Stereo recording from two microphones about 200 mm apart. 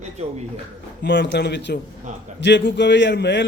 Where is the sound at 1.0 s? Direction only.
60° left (ahead or behind).